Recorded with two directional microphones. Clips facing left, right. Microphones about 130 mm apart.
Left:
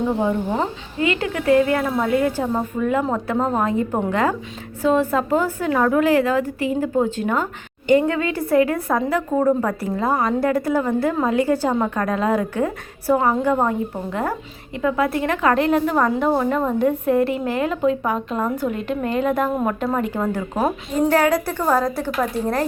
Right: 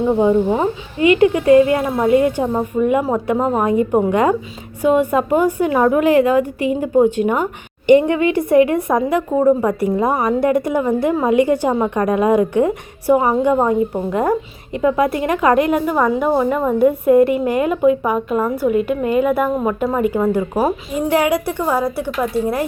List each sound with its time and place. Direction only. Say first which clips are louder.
0.2 s a woman's voice: right 6 dB; 15° right (ahead or behind)